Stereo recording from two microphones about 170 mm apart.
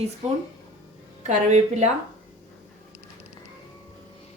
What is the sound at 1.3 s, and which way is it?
Speech, 40° right (ahead or behind).